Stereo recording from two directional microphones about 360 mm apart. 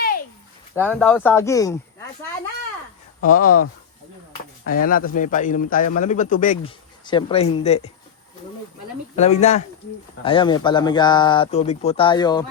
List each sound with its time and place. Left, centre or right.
0.8 s speech: centre
3.2 s speech: left
9.1 s speech: centre